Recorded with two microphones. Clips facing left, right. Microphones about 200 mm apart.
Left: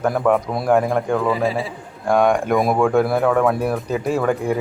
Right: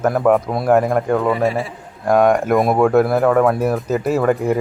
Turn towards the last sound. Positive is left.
turn(degrees=-5)  # may be behind; listen again after turning